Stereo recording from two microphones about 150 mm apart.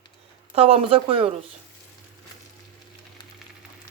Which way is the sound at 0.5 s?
40° right (ahead or behind).